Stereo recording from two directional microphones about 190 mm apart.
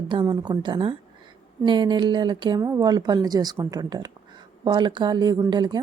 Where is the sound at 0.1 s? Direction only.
25° right (ahead or behind).